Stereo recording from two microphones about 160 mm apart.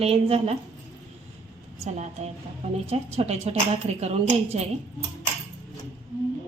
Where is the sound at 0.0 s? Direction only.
40° right (ahead or behind).